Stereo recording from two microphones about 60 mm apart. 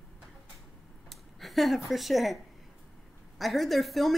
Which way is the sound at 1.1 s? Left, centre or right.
Centre.